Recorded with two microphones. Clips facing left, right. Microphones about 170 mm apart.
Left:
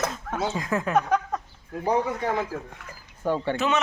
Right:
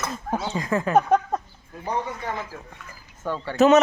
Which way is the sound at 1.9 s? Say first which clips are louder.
Left 4 dB; 65° left (ahead or behind).